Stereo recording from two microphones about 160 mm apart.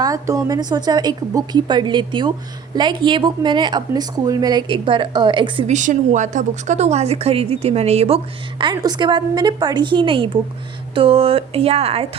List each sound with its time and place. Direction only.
0.0 s a woman's voice: 20° right (ahead or behind)
5.6 s a woman's voice: 50° right (ahead or behind)